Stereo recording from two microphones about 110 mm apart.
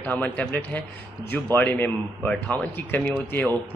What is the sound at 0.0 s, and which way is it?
A man's voice, 15° left (ahead or behind).